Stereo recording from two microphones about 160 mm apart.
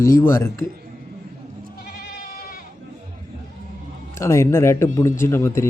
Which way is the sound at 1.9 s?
75° left (ahead or behind).